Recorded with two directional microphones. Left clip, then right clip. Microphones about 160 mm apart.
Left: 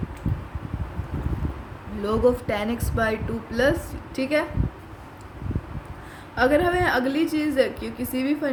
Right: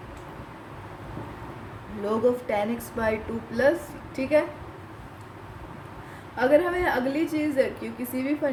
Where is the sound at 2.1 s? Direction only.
40° left (ahead or behind).